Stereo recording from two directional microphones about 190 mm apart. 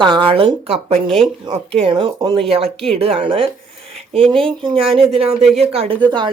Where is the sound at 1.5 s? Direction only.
30° right (ahead or behind).